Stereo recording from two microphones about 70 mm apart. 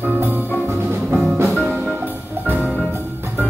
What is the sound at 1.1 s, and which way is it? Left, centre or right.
Music, centre.